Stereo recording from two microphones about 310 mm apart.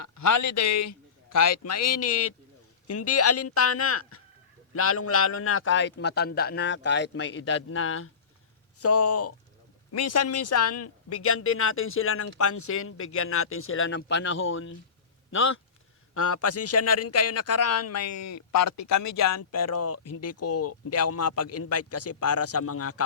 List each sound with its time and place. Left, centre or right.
0.0 s a man's voice: left